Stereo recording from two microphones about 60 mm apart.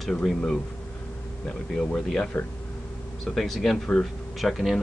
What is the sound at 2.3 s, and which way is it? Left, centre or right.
Speech, left.